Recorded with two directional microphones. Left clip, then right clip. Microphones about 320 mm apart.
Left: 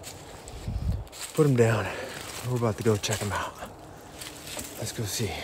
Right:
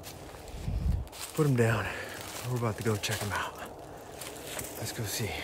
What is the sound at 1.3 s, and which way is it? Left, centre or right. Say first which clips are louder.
Speech: left 5 dB; centre.